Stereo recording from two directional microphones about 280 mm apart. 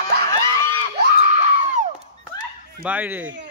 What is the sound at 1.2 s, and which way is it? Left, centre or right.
Screaming, right.